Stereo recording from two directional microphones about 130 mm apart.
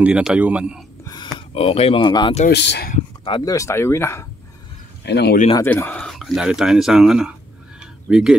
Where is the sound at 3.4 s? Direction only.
25° left (ahead or behind).